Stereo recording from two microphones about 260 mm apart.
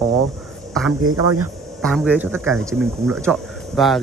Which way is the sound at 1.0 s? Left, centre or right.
Right.